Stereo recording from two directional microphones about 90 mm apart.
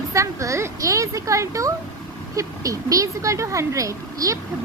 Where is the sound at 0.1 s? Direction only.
35° right (ahead or behind).